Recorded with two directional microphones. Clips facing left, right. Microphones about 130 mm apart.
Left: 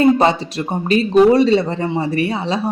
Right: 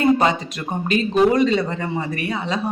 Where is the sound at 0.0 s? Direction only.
30° left (ahead or behind).